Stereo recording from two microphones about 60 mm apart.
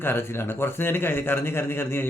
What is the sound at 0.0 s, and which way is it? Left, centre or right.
A man's voice, left.